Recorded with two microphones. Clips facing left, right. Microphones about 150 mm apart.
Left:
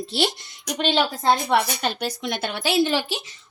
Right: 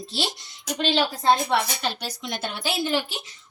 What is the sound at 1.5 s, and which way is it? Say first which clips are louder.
A woman's voice: left 3 dB; 55° left (ahead or behind).